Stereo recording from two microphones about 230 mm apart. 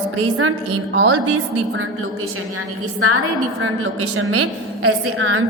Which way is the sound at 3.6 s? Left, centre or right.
Right.